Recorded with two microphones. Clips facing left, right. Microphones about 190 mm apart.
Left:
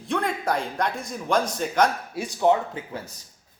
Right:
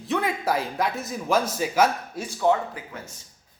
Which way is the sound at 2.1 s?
15° left (ahead or behind).